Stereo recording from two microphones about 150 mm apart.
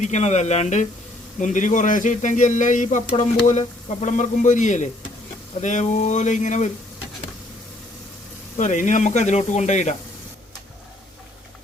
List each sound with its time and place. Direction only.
0.0 s speech: 50° left (ahead or behind)
8.5 s speech: 55° left (ahead or behind)